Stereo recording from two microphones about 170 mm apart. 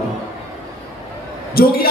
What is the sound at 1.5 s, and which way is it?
Music, 60° left (ahead or behind).